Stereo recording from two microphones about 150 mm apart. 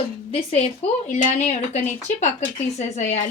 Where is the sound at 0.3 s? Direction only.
40° left (ahead or behind).